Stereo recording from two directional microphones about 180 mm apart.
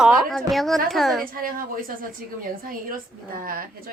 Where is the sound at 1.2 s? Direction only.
50° right (ahead or behind).